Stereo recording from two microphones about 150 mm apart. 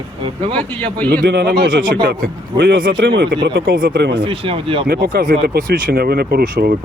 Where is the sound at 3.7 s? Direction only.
80° right.